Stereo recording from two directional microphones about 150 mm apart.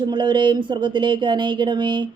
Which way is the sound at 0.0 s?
30° right (ahead or behind).